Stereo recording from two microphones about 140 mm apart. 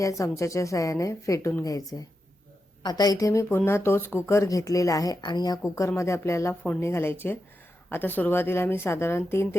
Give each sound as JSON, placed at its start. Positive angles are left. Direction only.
{"t": 0.0, "sound": "speech", "side_deg": 25}